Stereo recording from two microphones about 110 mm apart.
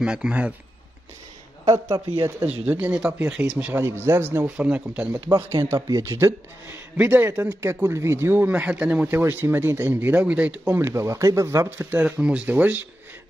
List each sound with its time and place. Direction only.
0.0 s a man's voice: 10° right (ahead or behind)
1.9 s speech: 45° right (ahead or behind)
2.4 s a man's voice: 15° right (ahead or behind)
5.5 s speech: 25° right (ahead or behind)
6.1 s a man's voice: 20° right (ahead or behind)
10.9 s speech: 25° right (ahead or behind)
11.9 s a man's voice: 10° right (ahead or behind)